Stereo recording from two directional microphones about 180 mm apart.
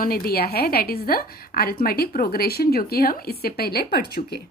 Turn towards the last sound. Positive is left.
turn(degrees=60)  # may be behind; listen again after turning